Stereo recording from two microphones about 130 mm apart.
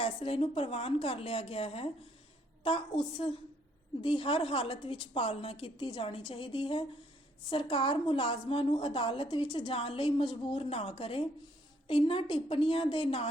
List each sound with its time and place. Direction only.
0.0 s a woman's voice: 45° left (ahead or behind)